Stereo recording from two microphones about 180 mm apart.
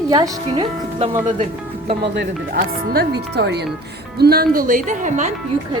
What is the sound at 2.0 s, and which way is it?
Speech, 70° right (ahead or behind).